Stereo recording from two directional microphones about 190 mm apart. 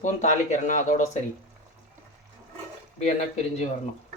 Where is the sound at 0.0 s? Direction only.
40° left (ahead or behind).